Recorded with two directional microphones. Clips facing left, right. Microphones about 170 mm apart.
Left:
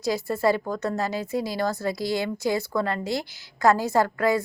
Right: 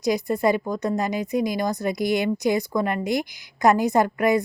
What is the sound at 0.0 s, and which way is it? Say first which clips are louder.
A woman's voice: right 2 dB; 15° right (ahead or behind).